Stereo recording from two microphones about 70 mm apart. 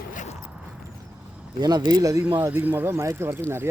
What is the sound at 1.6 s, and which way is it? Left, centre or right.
Speech, right.